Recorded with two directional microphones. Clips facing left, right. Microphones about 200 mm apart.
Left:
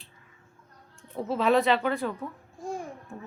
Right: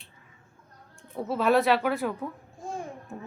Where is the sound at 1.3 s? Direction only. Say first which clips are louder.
Even; 5° right (ahead or behind).